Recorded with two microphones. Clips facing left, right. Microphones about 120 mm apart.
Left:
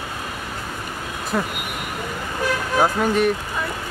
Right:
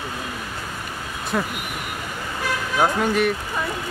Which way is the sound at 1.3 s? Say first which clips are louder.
Left 1 dB; 5° left (ahead or behind).